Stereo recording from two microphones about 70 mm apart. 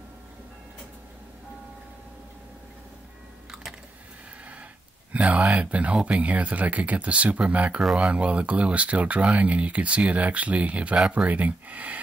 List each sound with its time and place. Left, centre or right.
5.1 s speech: centre